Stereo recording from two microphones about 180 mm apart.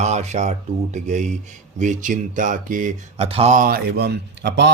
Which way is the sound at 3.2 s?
35° right (ahead or behind).